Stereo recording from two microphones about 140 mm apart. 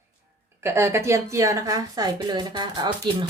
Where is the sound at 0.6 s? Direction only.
20° right (ahead or behind).